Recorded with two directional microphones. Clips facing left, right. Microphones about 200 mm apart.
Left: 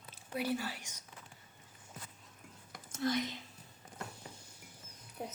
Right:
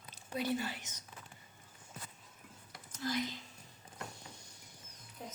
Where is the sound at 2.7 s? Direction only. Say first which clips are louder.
Left 5 dB; 50° left (ahead or behind).